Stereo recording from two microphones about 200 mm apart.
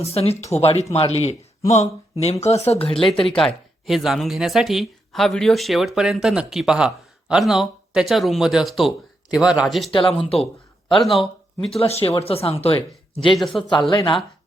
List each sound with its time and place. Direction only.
0.0 s speech: 30° left (ahead or behind)
3.2 s speech: centre (ahead or behind)
9.9 s speech: 25° left (ahead or behind)
10.8 s speech: centre (ahead or behind)
11.8 s speech: 30° left (ahead or behind)
13.3 s speech: centre (ahead or behind)
13.6 s speech: 20° left (ahead or behind)